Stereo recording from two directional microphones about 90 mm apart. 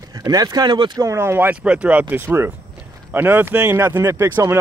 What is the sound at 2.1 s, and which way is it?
Speech, 25° right (ahead or behind).